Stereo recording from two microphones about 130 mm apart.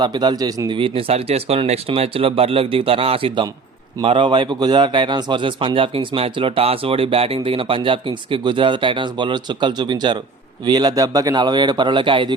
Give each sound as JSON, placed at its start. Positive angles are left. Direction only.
{"t": 0.0, "sound": "a man's voice", "side_deg": -35}
{"t": 0.8, "sound": "a man's voice", "side_deg": -45}